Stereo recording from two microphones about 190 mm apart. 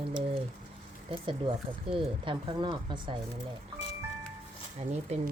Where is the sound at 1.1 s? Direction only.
25° right (ahead or behind).